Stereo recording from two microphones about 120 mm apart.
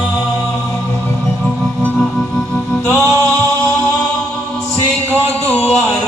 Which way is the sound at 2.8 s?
25° right (ahead or behind).